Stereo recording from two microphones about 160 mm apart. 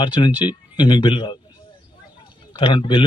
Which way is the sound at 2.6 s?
35° left (ahead or behind).